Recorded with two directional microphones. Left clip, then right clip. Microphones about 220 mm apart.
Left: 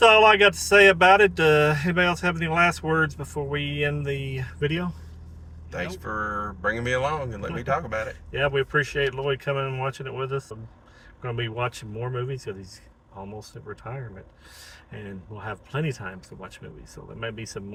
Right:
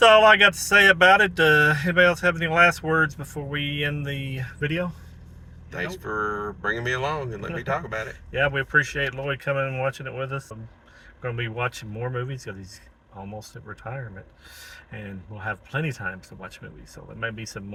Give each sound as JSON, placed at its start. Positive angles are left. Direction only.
{"t": 0.0, "sound": "speech", "side_deg": -20}
{"t": 5.7, "sound": "speech", "side_deg": 15}
{"t": 8.3, "sound": "speech", "side_deg": -20}